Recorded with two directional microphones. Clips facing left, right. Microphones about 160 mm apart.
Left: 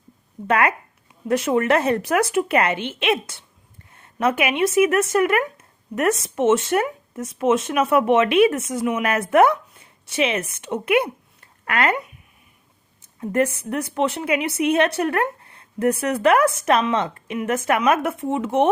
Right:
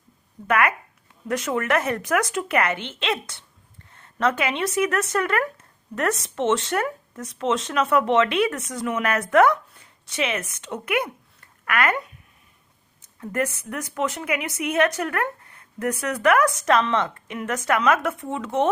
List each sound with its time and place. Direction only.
0.4 s a woman's voice: 30° left (ahead or behind)
8.8 s speech: 15° left (ahead or behind)
9.0 s a woman's voice: 25° left (ahead or behind)
13.1 s a woman's voice: 25° left (ahead or behind)